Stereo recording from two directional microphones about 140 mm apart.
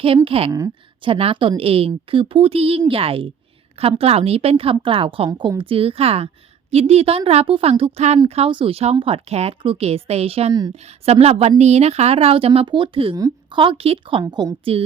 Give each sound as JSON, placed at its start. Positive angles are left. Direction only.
{"t": 0.3, "sound": "a woman's voice", "side_deg": -45}
{"t": 13.1, "sound": "a woman's voice", "side_deg": -25}
{"t": 13.6, "sound": "a woman's voice", "side_deg": -40}